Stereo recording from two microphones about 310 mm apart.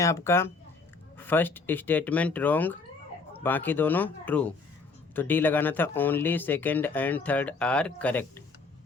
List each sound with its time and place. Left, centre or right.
0.0 s speech: centre